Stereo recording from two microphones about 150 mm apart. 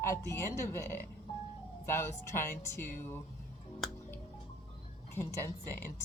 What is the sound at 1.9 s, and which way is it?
Speech, 20° left (ahead or behind).